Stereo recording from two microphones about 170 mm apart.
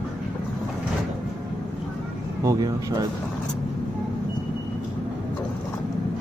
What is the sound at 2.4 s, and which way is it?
Speech, 20° right (ahead or behind).